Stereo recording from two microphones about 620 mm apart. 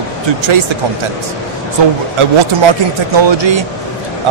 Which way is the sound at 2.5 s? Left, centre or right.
Right.